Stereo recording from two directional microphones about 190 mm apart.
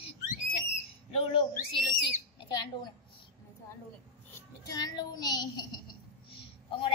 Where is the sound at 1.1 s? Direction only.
30° left (ahead or behind).